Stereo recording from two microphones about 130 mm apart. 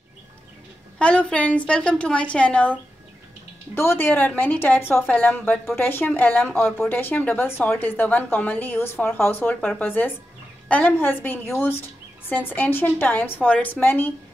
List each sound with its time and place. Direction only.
0.9 s speech: 10° left (ahead or behind)